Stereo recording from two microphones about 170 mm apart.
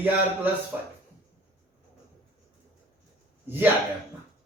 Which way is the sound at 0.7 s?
10° right (ahead or behind).